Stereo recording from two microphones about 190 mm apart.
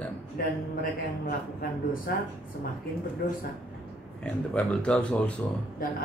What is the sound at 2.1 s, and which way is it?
Speech, 55° left (ahead or behind).